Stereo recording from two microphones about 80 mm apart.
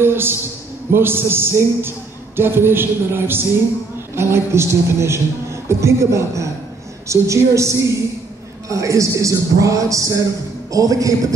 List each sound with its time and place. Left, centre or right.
0.0 s a man's voice: right